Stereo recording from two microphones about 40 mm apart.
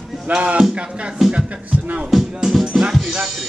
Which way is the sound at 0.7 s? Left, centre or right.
Right.